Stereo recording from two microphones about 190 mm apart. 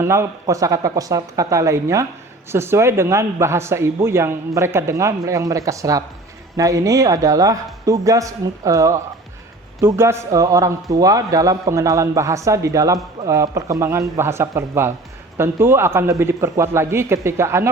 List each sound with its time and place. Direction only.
0.0 s speech: 15° right (ahead or behind)